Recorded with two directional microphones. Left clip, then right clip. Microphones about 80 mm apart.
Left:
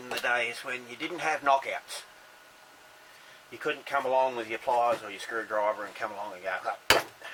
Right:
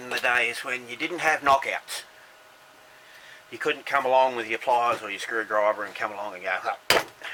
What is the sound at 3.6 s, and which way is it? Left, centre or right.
Speech, right.